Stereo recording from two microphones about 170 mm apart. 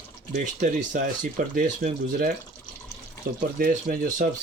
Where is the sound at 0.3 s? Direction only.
50° right (ahead or behind).